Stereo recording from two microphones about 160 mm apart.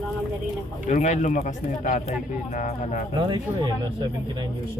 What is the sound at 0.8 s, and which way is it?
Speech, 50° left (ahead or behind).